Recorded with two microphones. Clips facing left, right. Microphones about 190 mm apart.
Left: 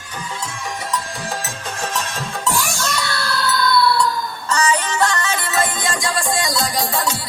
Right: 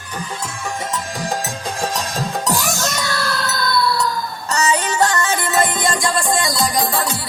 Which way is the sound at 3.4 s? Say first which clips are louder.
Left 5 dB; 45° right (ahead or behind).